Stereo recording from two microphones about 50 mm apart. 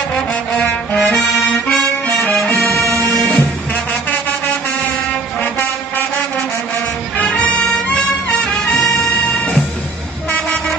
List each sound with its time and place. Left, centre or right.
1.5 s music: centre
2.0 s music: left
5.4 s music: left
7.2 s music: left